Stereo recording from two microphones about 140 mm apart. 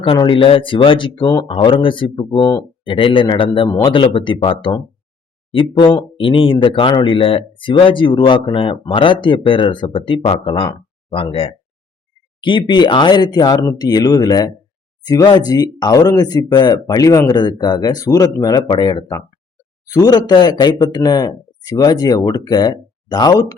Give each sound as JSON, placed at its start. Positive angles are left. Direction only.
{"t": 0.0, "sound": "speech", "side_deg": 40}
{"t": 2.8, "sound": "speech", "side_deg": 35}